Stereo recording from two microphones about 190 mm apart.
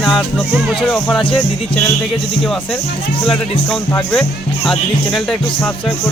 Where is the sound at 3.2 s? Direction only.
5° left (ahead or behind).